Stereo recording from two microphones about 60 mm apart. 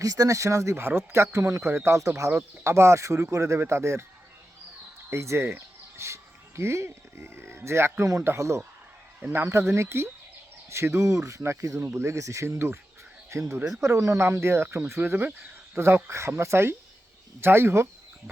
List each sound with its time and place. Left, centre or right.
0.0 s speech: right
0.8 s speech: right
2.6 s speech: right
5.1 s speech: right
12.5 s speech: right
13.3 s speech: right
16.0 s speech: right